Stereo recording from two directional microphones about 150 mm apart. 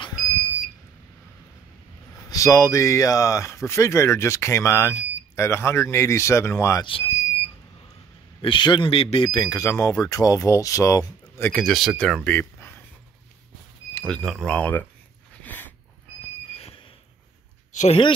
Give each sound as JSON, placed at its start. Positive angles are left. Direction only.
{"t": 2.2, "sound": "speech", "side_deg": 20}
{"t": 6.8, "sound": "speech", "side_deg": 35}
{"t": 8.4, "sound": "speech", "side_deg": 35}
{"t": 11.6, "sound": "speech", "side_deg": 0}
{"t": 13.9, "sound": "speech", "side_deg": 5}
{"t": 15.4, "sound": "a sound", "side_deg": 10}
{"t": 17.7, "sound": "speech", "side_deg": 40}